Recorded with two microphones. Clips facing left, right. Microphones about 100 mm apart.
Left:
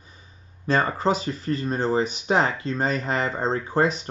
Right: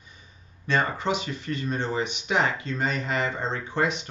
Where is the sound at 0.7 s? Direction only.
40° left (ahead or behind).